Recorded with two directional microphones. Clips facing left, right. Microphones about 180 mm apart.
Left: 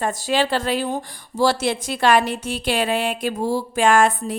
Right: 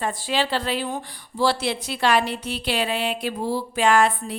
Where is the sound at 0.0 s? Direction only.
45° left (ahead or behind).